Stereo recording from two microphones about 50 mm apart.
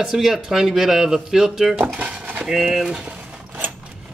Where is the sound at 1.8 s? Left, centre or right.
Right.